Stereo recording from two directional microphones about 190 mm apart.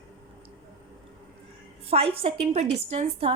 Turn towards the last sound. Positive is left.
turn(degrees=-35)  # may be behind; listen again after turning